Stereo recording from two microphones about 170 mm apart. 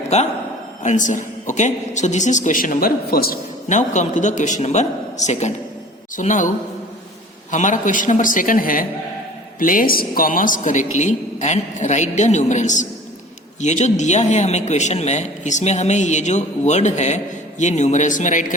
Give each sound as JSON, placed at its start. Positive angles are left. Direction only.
{"t": 0.8, "sound": "a man's voice", "side_deg": 45}
{"t": 3.7, "sound": "a man's voice", "side_deg": 45}
{"t": 7.5, "sound": "a man's voice", "side_deg": 45}